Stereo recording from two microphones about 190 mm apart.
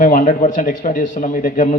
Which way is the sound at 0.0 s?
45° left (ahead or behind).